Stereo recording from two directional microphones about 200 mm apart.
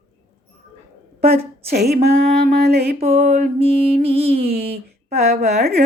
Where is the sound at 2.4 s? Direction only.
50° right (ahead or behind).